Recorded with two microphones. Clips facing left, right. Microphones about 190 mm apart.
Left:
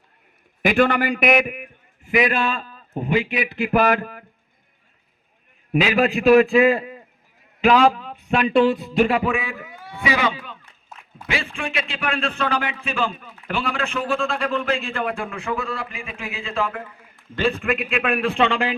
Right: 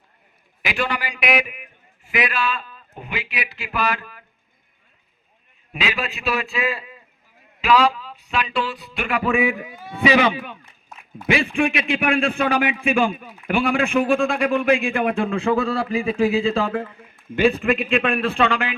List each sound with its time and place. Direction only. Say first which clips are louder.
0.6 s a man's voice: left 8 dB; 50° left (ahead or behind)
5.7 s speech: left 8 dB; 50° left (ahead or behind); by 9.2 s 35° left (ahead or behind)
9.4 s a man's voice: right 10 dB; 15° right (ahead or behind)
17.3 s a man's voice: right 4 dB; 10° right (ahead or behind); by 18.7 s 25° left (ahead or behind)